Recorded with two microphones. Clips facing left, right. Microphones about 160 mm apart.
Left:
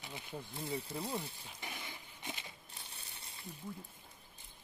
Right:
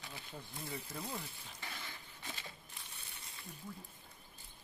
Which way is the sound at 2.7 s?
30° left (ahead or behind).